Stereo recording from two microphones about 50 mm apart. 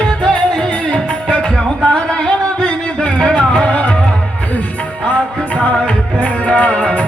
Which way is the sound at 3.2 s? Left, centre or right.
Centre.